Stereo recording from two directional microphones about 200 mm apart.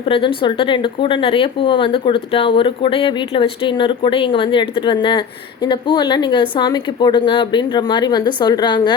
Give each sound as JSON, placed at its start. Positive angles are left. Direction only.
{"t": 0.0, "sound": "speech", "side_deg": 25}